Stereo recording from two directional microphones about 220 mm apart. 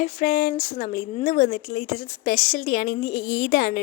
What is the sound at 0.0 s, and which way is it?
Speech, 35° left (ahead or behind).